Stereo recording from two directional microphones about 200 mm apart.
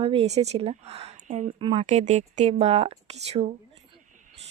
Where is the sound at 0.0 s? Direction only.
30° right (ahead or behind).